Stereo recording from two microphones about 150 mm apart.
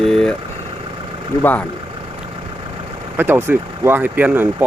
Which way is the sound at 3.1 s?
15° right (ahead or behind).